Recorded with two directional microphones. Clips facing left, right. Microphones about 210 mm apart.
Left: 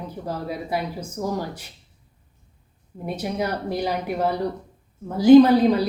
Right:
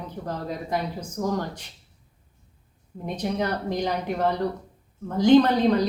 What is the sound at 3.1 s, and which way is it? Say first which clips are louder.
Speech: left 1 dB; 10° left (ahead or behind).